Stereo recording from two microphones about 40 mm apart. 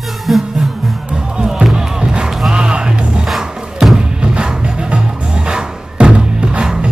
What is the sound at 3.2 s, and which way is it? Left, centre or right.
Music, centre.